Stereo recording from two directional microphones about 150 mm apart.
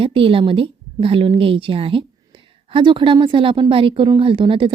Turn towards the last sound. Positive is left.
turn(degrees=-35)  # may be behind; listen again after turning